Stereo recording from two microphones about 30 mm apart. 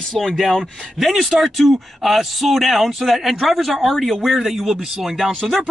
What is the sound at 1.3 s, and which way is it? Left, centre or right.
Speech, centre.